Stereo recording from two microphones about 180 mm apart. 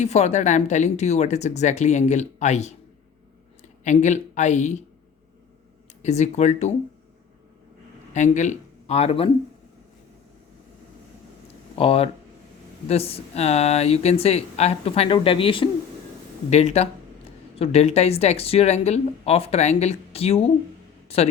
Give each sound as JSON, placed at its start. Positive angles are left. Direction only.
{"t": 0.0, "sound": "speech", "side_deg": 40}
{"t": 6.0, "sound": "speech", "side_deg": 40}
{"t": 8.1, "sound": "speech", "side_deg": 40}
{"t": 11.8, "sound": "speech", "side_deg": 30}